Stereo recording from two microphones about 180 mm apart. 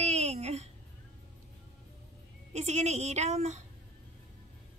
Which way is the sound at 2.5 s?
40° right (ahead or behind).